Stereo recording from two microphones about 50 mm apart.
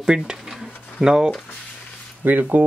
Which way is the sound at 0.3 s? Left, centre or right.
Centre.